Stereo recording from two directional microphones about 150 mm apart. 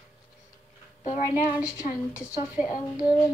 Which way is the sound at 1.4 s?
20° left (ahead or behind).